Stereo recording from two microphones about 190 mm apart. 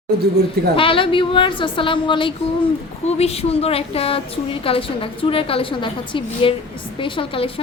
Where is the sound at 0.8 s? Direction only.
30° left (ahead or behind).